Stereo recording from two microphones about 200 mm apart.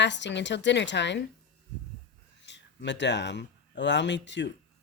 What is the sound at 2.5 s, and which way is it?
A woman's voice, 60° left (ahead or behind).